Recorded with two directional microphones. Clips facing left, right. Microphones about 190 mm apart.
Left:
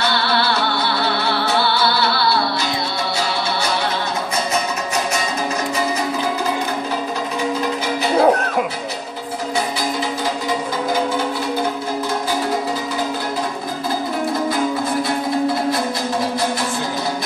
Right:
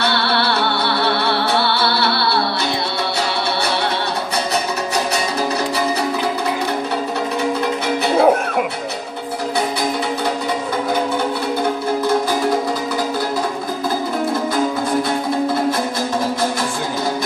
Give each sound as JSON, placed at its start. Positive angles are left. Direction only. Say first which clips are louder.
{"t": 0.1, "sound": "music", "louder": "right 1 dB", "side_deg": -60}
{"t": 8.2, "sound": "music", "louder": "even", "side_deg": -5}